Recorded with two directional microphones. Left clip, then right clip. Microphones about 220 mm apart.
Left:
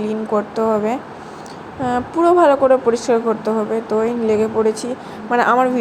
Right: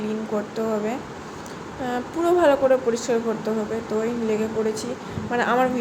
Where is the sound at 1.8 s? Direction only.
15° left (ahead or behind).